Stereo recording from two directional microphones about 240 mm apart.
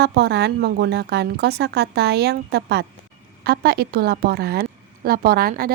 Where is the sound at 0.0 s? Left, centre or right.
Right.